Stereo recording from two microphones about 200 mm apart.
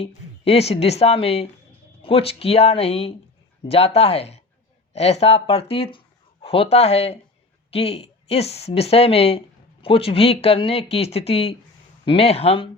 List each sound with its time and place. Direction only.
0.0 s a woman's voice: 30° left (ahead or behind)